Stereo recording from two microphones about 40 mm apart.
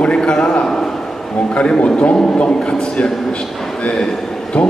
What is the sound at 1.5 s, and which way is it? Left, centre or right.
Speech, left.